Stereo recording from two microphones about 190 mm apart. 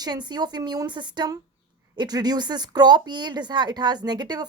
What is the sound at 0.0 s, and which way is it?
A woman's voice, 20° right (ahead or behind).